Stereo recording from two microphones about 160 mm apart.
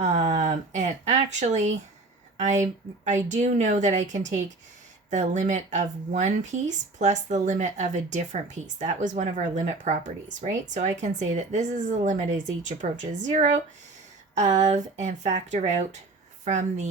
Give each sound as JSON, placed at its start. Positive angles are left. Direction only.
{"t": 0.0, "sound": "speech", "side_deg": -45}